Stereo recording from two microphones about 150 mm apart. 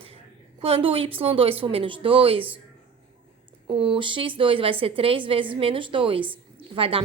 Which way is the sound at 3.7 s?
35° right (ahead or behind).